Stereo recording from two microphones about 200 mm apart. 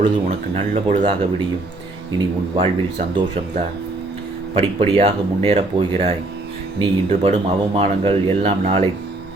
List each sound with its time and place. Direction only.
0.0 s speech: 30° right (ahead or behind)
2.1 s speech: 25° right (ahead or behind)